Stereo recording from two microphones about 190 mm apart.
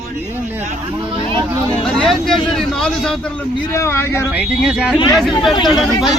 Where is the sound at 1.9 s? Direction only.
Centre (ahead or behind).